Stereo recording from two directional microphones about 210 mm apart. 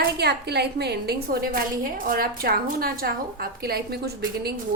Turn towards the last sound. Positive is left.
turn(degrees=-50)  # may be behind; listen again after turning